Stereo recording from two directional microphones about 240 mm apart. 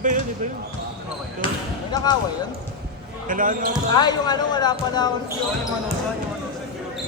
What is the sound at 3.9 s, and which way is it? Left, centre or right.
Speech, centre.